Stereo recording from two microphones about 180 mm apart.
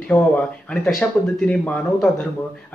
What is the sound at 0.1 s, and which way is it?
Speech, 20° left (ahead or behind).